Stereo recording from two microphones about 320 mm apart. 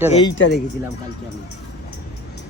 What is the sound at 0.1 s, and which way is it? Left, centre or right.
Speech, centre.